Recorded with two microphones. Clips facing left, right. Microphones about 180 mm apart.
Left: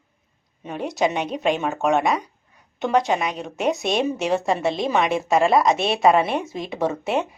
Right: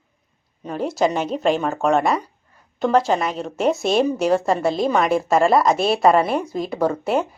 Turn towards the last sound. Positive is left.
turn(degrees=0)  # may be behind; listen again after turning